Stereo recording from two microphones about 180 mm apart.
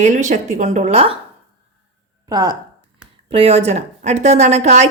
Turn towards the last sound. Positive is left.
turn(degrees=-40)  # may be behind; listen again after turning